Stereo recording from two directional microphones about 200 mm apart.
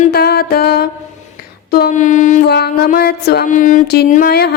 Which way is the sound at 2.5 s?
55° left (ahead or behind).